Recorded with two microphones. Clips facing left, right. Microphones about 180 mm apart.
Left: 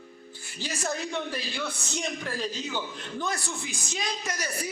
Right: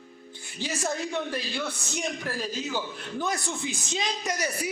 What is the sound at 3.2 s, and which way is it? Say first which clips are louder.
A man's voice: right 4 dB; 20° right (ahead or behind).